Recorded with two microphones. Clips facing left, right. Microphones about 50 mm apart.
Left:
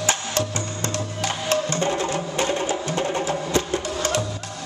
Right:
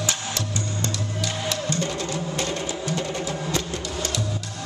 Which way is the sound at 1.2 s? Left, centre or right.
Left.